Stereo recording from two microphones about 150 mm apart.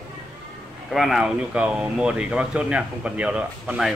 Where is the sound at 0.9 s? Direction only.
Centre (ahead or behind).